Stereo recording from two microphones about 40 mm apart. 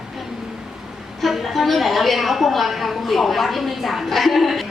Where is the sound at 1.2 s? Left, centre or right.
Centre.